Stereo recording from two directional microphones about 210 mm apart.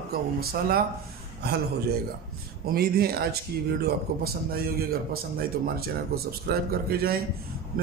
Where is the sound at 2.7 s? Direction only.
45° right (ahead or behind).